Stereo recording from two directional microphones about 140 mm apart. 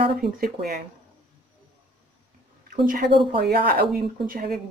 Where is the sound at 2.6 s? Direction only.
85° right.